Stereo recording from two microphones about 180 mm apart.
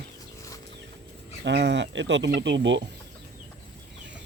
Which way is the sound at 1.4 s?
75° right (ahead or behind).